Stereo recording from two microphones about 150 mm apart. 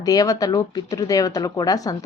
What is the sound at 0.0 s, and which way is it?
A woman's voice, 25° left (ahead or behind).